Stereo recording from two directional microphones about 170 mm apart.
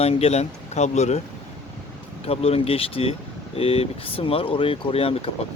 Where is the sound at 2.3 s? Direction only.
35° left (ahead or behind).